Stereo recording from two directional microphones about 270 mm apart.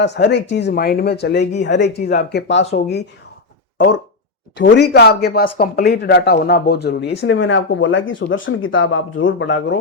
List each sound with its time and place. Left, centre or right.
0.0 s speech: left